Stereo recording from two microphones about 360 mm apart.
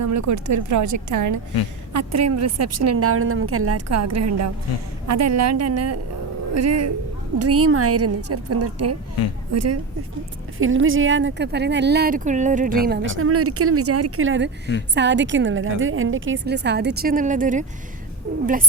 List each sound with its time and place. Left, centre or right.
0.0 s a woman's voice: right
10.6 s speech: right